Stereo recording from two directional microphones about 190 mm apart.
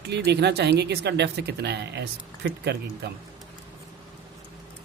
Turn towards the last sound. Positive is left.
turn(degrees=-60)  # may be behind; listen again after turning